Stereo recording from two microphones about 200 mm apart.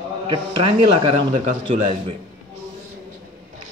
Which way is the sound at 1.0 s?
30° right (ahead or behind).